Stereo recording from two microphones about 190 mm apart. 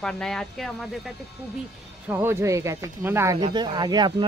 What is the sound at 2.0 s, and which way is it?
Speech, 10° right (ahead or behind).